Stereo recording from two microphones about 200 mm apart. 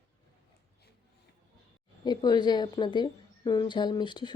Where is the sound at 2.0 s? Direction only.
20° left (ahead or behind).